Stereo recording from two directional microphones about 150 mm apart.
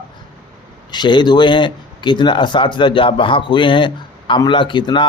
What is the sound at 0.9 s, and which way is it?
Speech, 30° left (ahead or behind).